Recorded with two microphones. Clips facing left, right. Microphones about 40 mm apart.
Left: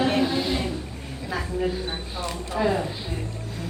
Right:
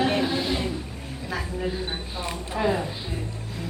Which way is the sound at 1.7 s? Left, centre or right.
Centre.